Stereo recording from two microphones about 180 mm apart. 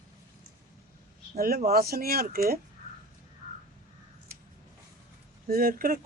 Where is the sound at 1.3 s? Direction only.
55° right (ahead or behind).